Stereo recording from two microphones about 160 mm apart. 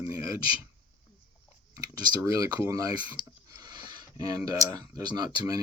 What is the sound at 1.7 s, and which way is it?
Speech, 20° right (ahead or behind).